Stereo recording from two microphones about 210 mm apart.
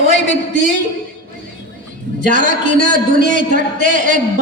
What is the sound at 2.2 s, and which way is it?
A man's voice, 40° right (ahead or behind).